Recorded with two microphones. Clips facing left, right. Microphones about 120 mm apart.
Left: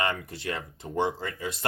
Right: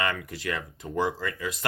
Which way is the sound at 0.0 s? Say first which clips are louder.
Even; 30° left (ahead or behind).